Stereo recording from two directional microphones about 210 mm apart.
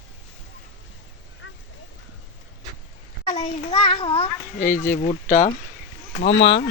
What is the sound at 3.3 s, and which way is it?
A child's voice, 30° left (ahead or behind).